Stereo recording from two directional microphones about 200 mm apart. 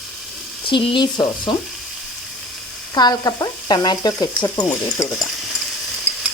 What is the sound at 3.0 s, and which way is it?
Sizzle, 20° left (ahead or behind).